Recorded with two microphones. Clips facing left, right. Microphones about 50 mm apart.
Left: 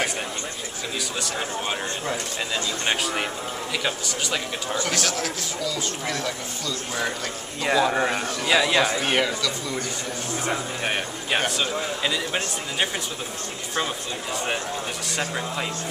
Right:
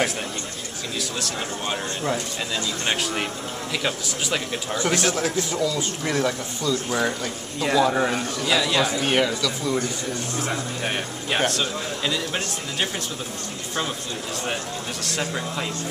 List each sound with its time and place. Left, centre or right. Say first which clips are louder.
1.2 s speech: left 1 dB; centre
4.7 s speech: right 4 dB; right
7.6 s a man's voice: right 1 dB; centre
9.0 s a man's voice: right 2 dB; centre
15.0 s a man's voice: right 2 dB; centre